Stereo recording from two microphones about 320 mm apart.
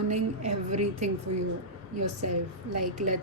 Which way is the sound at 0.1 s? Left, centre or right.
Right.